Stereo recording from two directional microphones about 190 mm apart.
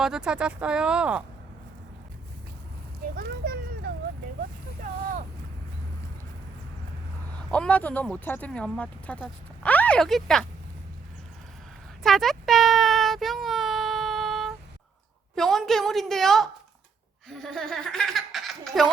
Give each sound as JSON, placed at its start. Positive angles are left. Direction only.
{"t": 0.0, "sound": "speech", "side_deg": -5}
{"t": 3.2, "sound": "a sound", "side_deg": -50}
{"t": 4.8, "sound": "boat", "side_deg": -45}
{"t": 7.5, "sound": "speech", "side_deg": 5}
{"t": 12.0, "sound": "a sound", "side_deg": 0}
{"t": 15.4, "sound": "speech", "side_deg": 0}